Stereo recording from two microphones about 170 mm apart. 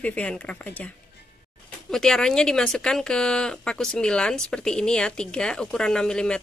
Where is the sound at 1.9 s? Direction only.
5° left (ahead or behind).